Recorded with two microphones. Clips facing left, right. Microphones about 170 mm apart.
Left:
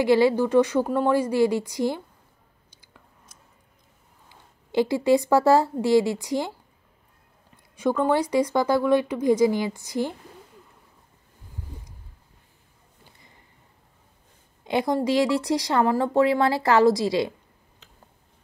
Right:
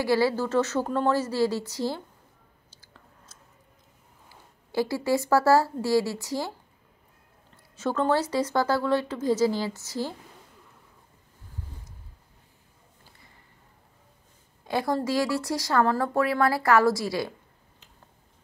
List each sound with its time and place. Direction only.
0.0 s speech: 20° left (ahead or behind)
2.8 s chewing: 15° left (ahead or behind)
4.3 s speech: 20° left (ahead or behind)
7.5 s speech: 15° left (ahead or behind)
14.6 s speech: 20° left (ahead or behind)